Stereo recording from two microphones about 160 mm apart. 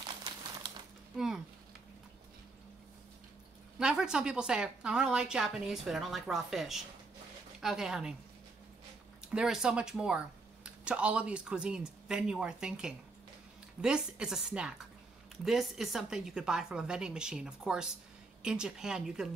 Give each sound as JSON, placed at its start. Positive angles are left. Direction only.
{"t": 0.3, "sound": "crumpling", "side_deg": -30}
{"t": 1.1, "sound": "a sound", "side_deg": 0}
{"t": 3.8, "sound": "speech", "side_deg": -5}
{"t": 9.3, "sound": "speech", "side_deg": -5}